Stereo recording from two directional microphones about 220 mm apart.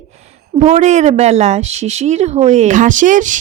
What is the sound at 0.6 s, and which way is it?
Speech, 30° right (ahead or behind).